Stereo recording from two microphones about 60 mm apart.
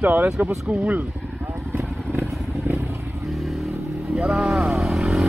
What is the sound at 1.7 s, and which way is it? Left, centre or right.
Vehicle, right.